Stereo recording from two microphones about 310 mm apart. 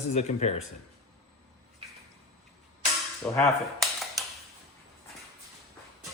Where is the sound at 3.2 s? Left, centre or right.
Centre.